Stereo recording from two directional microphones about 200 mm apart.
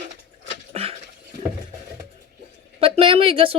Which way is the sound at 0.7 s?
30° right (ahead or behind).